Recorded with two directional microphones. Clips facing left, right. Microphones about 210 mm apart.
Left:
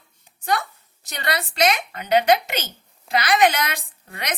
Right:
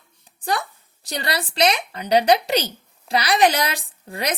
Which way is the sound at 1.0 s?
35° right (ahead or behind).